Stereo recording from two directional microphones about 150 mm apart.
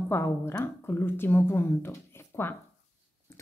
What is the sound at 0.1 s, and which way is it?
A woman's voice, 15° left (ahead or behind).